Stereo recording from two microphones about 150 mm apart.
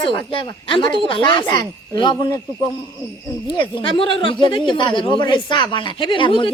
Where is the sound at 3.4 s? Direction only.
35° left (ahead or behind).